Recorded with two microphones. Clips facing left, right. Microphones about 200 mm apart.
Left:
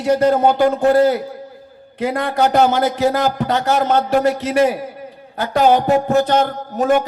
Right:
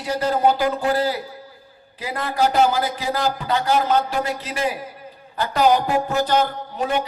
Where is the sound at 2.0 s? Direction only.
60° left (ahead or behind).